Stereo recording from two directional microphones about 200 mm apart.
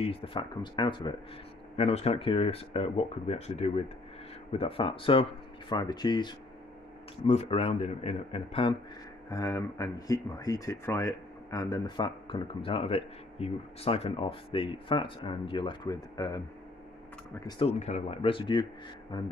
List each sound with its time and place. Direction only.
0.0 s speech: 30° left (ahead or behind)
9.3 s speech: 15° left (ahead or behind)
17.6 s speech: 35° left (ahead or behind)